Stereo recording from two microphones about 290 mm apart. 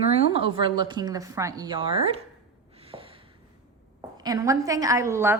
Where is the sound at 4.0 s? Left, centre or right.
Centre.